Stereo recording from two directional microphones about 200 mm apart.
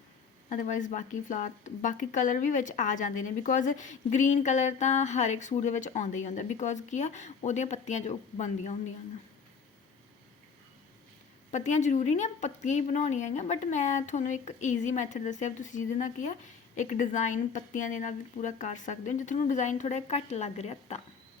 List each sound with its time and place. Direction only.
0.5 s speech: 40° left (ahead or behind)
11.5 s speech: 35° left (ahead or behind)